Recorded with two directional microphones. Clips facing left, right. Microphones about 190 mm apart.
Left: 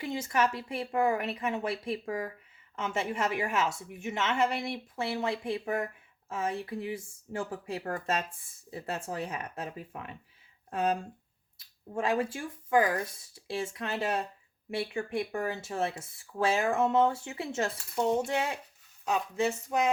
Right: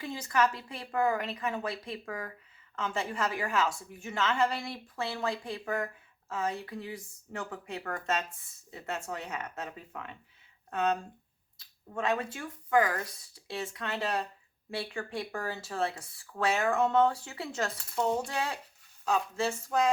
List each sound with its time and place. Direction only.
0.0 s a woman's voice: 25° left (ahead or behind)